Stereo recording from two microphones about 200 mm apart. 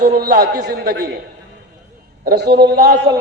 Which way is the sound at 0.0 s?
45° right (ahead or behind).